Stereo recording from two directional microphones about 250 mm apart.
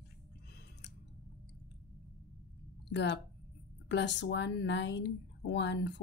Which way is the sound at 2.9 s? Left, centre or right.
Left.